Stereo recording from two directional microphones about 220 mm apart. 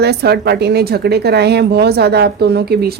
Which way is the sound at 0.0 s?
45° right (ahead or behind).